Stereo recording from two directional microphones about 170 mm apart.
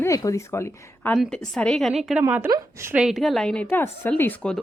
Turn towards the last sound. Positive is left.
turn(degrees=10)  # may be behind; listen again after turning